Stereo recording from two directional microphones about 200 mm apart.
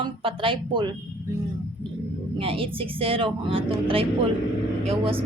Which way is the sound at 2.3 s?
25° right (ahead or behind).